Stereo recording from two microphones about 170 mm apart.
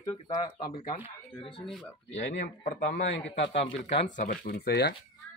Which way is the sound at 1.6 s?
5° left (ahead or behind).